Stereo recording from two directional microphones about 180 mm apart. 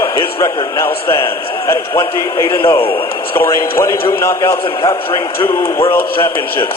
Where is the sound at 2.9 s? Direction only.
10° left (ahead or behind).